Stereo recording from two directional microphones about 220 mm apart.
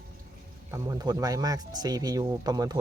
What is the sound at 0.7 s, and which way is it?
Speech, 15° right (ahead or behind).